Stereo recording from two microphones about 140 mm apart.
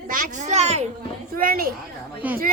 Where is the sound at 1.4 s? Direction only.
90° right.